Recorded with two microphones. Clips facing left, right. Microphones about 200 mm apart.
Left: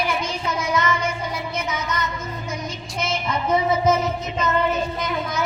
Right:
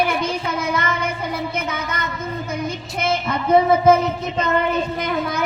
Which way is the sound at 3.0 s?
60° right (ahead or behind).